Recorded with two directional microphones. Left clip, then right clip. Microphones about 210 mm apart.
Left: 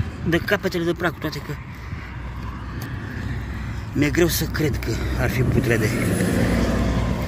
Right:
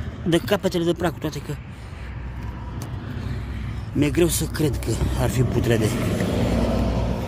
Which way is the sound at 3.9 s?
15° right (ahead or behind).